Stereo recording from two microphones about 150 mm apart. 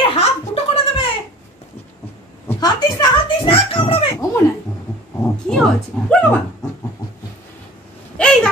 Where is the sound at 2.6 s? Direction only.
25° left (ahead or behind).